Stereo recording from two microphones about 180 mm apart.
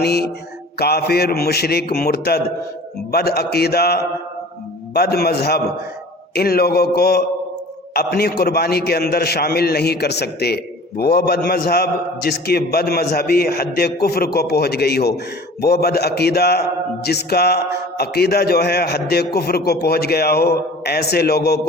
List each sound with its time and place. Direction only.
0.0 s a man's voice: 65° left (ahead or behind)